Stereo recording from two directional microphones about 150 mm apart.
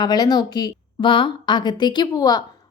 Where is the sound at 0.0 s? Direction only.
25° left (ahead or behind).